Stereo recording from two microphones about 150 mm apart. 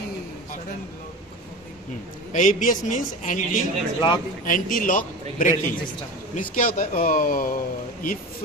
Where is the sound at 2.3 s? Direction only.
60° left (ahead or behind).